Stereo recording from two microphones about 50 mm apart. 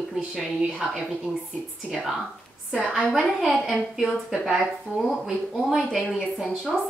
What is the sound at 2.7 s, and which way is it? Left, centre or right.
A woman's voice, centre.